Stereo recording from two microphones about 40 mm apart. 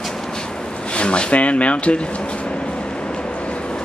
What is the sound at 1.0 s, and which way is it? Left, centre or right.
Speech, left.